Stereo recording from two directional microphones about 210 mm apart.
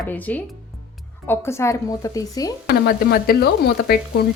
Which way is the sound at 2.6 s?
50° left (ahead or behind).